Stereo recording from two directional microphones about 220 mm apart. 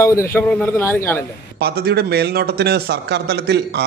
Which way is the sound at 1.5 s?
45° right (ahead or behind).